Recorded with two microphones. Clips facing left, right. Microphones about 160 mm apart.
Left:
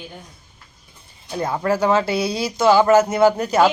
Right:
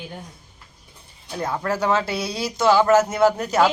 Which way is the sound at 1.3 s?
5° left (ahead or behind).